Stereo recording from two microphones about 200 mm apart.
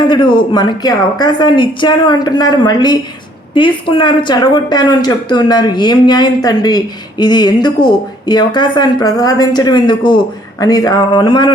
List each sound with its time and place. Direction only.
0.1 s a woman's voice: 25° left (ahead or behind)